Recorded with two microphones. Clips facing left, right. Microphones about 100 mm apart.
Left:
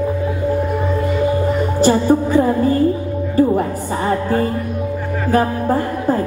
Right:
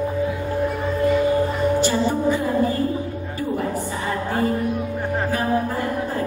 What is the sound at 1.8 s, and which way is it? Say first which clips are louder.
Music: left 6 dB; 40° left (ahead or behind).